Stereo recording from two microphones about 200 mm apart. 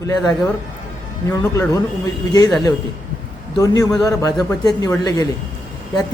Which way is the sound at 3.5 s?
15° left (ahead or behind).